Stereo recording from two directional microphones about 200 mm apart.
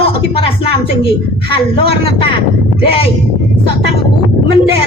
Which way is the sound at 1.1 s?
25° left (ahead or behind).